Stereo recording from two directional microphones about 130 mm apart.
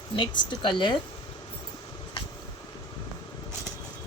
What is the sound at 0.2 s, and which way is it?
Speech, 35° left (ahead or behind).